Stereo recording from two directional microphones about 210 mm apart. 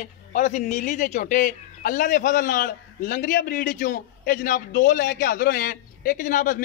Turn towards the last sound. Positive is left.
turn(degrees=40)  # may be behind; listen again after turning